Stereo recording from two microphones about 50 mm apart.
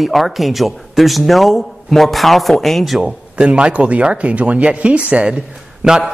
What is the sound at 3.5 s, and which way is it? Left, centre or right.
A man's voice, right.